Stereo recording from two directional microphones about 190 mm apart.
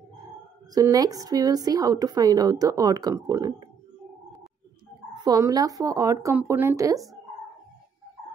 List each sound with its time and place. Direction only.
0.7 s a woman's voice: 20° right (ahead or behind)
5.1 s speech: 20° right (ahead or behind)